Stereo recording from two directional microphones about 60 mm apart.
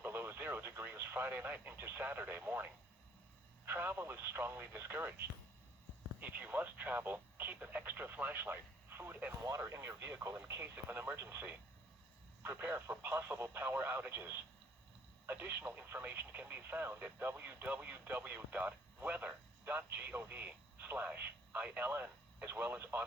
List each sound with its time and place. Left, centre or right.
0.0 s radio: right
1.7 s speech: right
3.7 s speech: right
6.1 s speech: right
9.6 s speech: right